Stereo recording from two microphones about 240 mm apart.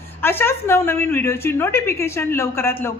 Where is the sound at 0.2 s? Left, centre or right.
Centre.